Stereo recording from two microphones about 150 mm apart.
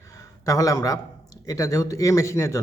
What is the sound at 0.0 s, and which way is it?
A man's voice, 20° left (ahead or behind).